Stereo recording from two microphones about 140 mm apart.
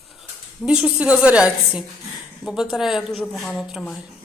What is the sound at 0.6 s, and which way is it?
A woman's voice, 5° right (ahead or behind).